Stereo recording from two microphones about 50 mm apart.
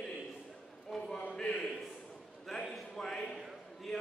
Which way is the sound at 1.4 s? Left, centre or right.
Centre.